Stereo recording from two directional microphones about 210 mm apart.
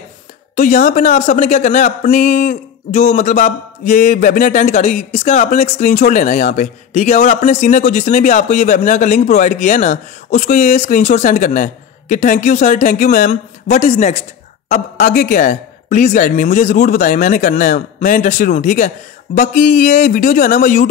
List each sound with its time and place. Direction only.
0.6 s speech: 35° left (ahead or behind)